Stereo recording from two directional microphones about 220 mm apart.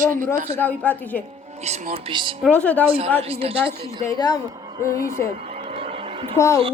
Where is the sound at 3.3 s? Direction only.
25° right (ahead or behind).